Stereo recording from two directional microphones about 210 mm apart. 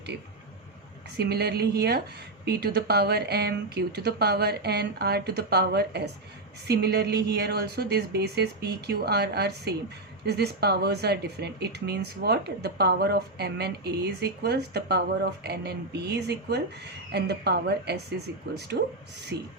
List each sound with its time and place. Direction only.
1.1 s speech: 50° right (ahead or behind)